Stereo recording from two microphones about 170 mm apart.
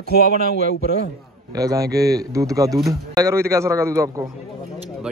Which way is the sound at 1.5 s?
20° right (ahead or behind).